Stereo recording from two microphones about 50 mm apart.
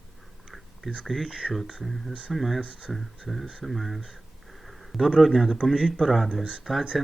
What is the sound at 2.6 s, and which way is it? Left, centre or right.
Speech, right.